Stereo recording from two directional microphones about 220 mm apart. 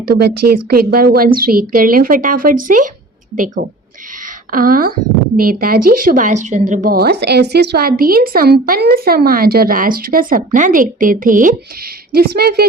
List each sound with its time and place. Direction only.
0.1 s a woman's voice: 45° right (ahead or behind)
4.5 s a woman's voice: 40° right (ahead or behind)